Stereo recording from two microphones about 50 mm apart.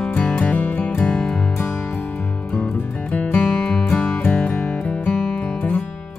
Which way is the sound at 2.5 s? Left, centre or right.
Left.